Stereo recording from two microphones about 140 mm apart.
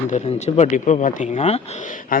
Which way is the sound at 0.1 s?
55° left (ahead or behind).